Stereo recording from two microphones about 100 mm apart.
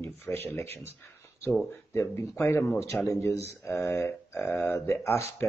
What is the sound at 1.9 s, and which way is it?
Speech, 30° left (ahead or behind).